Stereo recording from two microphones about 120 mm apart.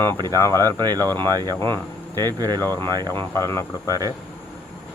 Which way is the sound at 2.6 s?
20° left (ahead or behind).